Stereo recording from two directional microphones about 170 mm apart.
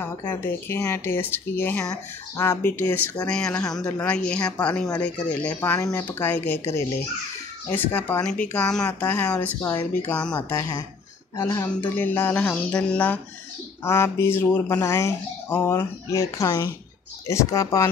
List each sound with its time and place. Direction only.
0.0 s speech: 15° left (ahead or behind)
10.3 s speech: 25° left (ahead or behind)